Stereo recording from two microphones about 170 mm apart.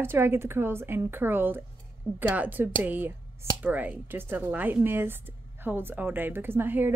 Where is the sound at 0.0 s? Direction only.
15° right (ahead or behind).